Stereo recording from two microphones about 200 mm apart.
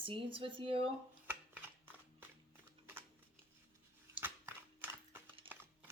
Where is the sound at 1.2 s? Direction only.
10° right (ahead or behind).